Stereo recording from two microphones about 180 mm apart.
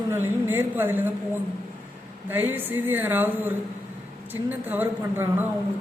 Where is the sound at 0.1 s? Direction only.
10° right (ahead or behind).